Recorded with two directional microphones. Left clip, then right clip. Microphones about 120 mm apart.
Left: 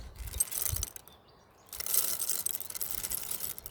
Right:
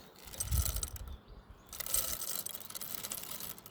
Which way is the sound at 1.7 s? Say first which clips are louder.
Left 3 dB; 20° left (ahead or behind).